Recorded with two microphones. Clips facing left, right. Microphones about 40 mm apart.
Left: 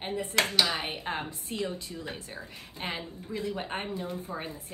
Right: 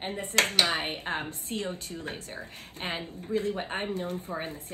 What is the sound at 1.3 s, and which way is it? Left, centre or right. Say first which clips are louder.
A woman's voice: even; right.